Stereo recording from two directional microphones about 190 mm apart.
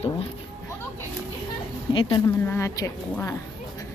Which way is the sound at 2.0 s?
25° left (ahead or behind).